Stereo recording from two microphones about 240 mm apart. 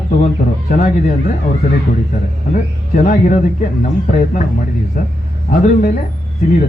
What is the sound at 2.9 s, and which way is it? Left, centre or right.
Speech, left.